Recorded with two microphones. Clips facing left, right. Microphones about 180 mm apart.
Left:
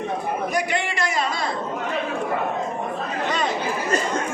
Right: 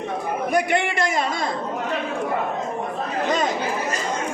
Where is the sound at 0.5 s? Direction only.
55° right (ahead or behind).